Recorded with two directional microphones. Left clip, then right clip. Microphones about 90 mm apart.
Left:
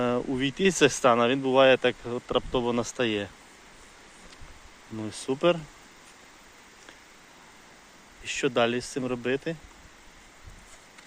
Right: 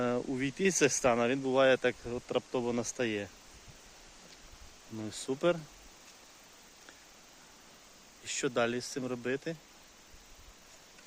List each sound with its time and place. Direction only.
0.0 s a sound: 20° right (ahead or behind)
0.3 s speech: 15° right (ahead or behind)
4.9 s speech: 15° right (ahead or behind)
8.2 s speech: centre (ahead or behind)